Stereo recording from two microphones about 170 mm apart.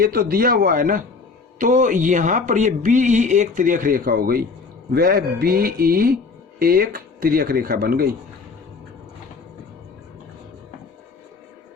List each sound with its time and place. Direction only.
0.0 s speech: 60° right (ahead or behind)